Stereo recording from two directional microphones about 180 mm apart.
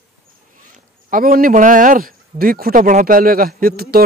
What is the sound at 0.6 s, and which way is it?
Speech, 50° right (ahead or behind).